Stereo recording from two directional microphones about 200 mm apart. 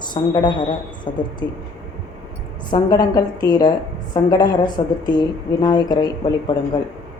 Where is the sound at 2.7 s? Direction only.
20° left (ahead or behind).